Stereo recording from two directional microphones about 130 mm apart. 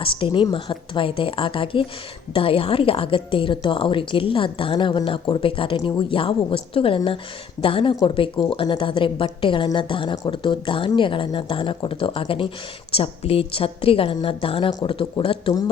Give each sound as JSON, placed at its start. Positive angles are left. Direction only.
{"t": 0.0, "sound": "a woman's voice", "side_deg": 45}